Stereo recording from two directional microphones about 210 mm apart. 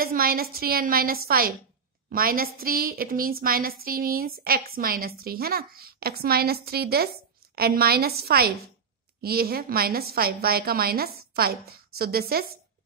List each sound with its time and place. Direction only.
0.0 s a woman's voice: 45° right (ahead or behind)